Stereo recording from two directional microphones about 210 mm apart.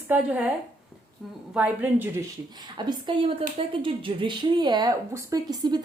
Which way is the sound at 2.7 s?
25° right (ahead or behind).